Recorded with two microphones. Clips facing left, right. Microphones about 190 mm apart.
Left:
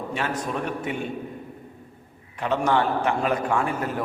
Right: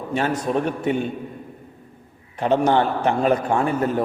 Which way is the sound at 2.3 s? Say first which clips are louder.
Right 5 dB; 35° right (ahead or behind).